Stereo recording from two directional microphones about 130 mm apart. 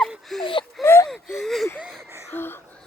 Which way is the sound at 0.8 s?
Centre (ahead or behind).